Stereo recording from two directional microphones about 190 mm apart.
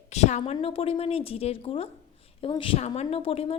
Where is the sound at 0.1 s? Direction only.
35° left (ahead or behind).